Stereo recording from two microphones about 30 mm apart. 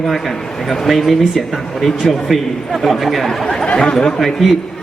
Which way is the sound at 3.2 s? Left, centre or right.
Left.